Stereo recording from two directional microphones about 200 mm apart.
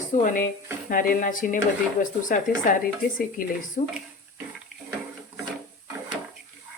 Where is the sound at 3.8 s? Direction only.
35° left (ahead or behind).